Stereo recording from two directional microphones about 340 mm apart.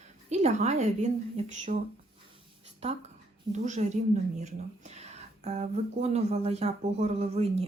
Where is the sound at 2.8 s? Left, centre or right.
Centre.